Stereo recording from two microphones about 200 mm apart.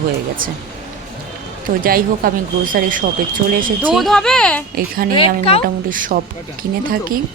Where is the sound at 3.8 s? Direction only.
Centre (ahead or behind).